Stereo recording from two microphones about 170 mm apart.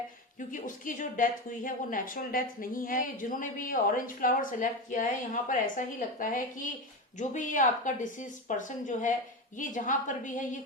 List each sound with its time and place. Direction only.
0.3 s speech: 50° left (ahead or behind)